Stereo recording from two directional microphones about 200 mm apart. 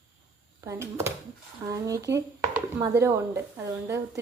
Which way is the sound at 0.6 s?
15° right (ahead or behind).